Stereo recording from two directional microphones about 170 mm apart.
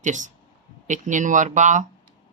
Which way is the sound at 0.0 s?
45° right (ahead or behind).